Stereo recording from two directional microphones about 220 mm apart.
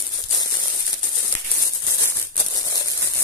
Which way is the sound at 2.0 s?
15° left (ahead or behind).